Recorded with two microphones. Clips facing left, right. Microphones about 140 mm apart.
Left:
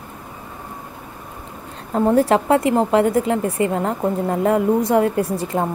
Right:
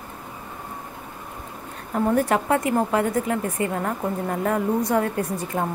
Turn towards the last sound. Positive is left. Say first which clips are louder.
# left 5 dB
turn(degrees=30)  # may be behind; listen again after turning